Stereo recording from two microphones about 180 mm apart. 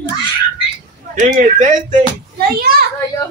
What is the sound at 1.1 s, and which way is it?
Speech, 50° right (ahead or behind).